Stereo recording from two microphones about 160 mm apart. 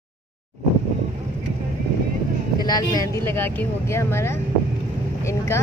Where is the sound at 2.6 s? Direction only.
25° left (ahead or behind).